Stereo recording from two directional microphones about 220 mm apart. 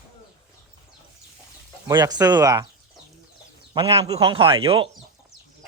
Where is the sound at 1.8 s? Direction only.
15° right (ahead or behind).